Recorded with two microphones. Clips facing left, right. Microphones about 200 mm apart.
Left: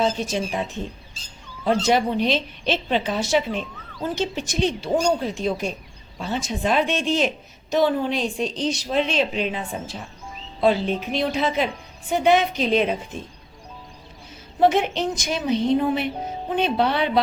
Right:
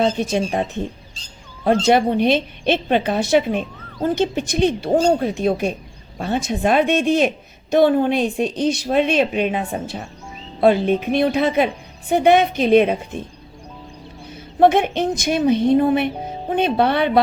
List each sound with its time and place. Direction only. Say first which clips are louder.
0.0 s a woman's voice: right 4 dB; 60° right (ahead or behind)
14.6 s a woman's voice: right 4 dB; 55° right (ahead or behind)